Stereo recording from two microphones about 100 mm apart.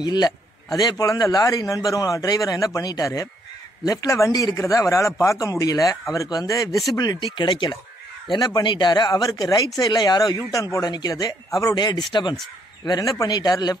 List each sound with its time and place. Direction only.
0.0 s a man's voice: 45° left (ahead or behind)
8.3 s a man's voice: 45° left (ahead or behind)
12.8 s a man's voice: 40° left (ahead or behind)